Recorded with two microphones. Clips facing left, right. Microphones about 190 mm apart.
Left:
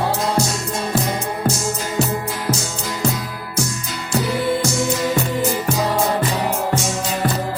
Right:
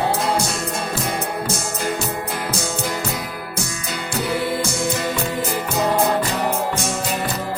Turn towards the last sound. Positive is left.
turn(degrees=-55)  # may be behind; listen again after turning